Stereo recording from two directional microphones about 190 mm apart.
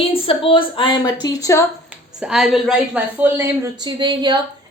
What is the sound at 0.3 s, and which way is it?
A woman's voice, 30° left (ahead or behind).